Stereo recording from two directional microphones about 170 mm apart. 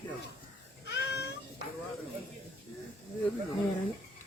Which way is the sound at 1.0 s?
75° left (ahead or behind).